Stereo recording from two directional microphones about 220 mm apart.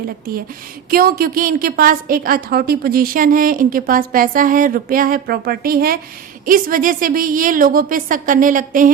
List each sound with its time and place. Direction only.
0.9 s a woman's voice: 40° right (ahead or behind)